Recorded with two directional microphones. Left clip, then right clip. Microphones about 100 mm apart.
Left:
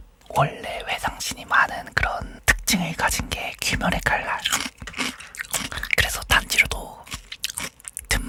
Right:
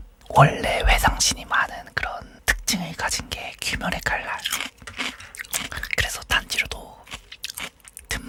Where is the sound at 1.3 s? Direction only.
Centre (ahead or behind).